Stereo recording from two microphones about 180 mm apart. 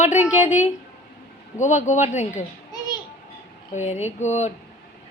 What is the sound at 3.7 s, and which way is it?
Speech, 40° left (ahead or behind).